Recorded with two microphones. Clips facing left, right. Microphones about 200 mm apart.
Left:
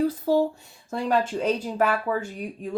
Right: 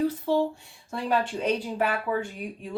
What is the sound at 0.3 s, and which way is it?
Speech, 40° left (ahead or behind).